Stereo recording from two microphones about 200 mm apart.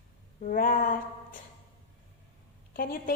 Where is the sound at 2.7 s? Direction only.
45° left (ahead or behind).